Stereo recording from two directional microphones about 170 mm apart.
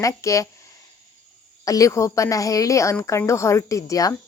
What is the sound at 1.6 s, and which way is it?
Speech, 20° left (ahead or behind).